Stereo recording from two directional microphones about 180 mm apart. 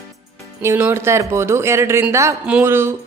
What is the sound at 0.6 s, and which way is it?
A woman's voice, 15° right (ahead or behind).